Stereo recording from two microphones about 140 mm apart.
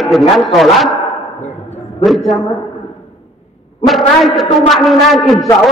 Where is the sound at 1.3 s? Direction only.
55° left (ahead or behind).